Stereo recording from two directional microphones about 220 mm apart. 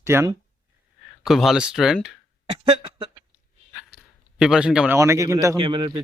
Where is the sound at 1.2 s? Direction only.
Centre (ahead or behind).